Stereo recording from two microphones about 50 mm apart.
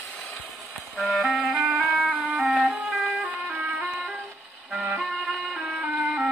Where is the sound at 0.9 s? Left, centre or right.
Centre.